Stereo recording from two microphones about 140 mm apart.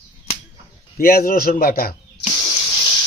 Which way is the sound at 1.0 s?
90° left.